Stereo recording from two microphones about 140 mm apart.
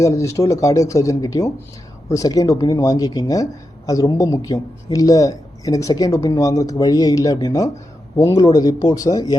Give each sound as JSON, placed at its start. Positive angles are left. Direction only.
{"t": 0.0, "sound": "speech", "side_deg": 20}